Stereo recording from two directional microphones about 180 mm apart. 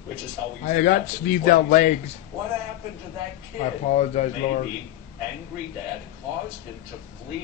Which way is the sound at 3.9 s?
40° left (ahead or behind).